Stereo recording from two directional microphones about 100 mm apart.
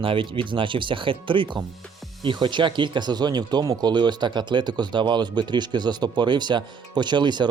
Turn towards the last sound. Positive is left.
turn(degrees=-50)  # may be behind; listen again after turning